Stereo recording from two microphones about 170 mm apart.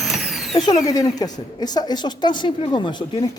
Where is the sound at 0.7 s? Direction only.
20° left (ahead or behind).